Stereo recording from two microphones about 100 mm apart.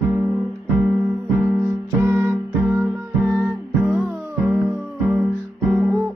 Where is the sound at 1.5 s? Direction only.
30° right (ahead or behind).